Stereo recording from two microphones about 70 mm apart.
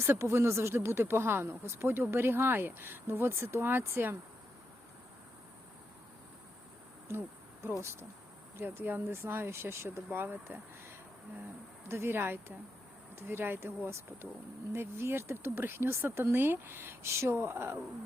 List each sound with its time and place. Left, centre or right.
0.0 s speech: right
7.1 s a sound: right
8.5 s speech: right